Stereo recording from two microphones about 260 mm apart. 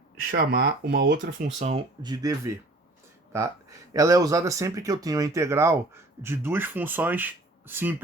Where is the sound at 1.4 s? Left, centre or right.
Right.